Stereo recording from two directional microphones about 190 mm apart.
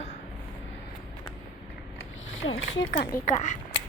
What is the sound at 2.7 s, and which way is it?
Speech, 65° left (ahead or behind).